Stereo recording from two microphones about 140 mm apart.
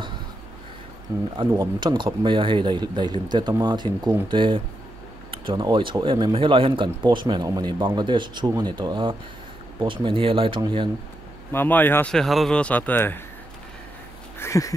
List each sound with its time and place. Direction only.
1.1 s speech: 20° right (ahead or behind)
5.3 s a sound: 35° right (ahead or behind)
5.6 s speech: 35° right (ahead or behind)
11.5 s speech: 15° left (ahead or behind)
12.1 s speech: centre (ahead or behind)
14.4 s a sound: 20° left (ahead or behind)